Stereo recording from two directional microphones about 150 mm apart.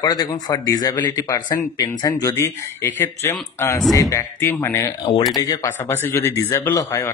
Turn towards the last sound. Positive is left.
turn(degrees=15)  # may be behind; listen again after turning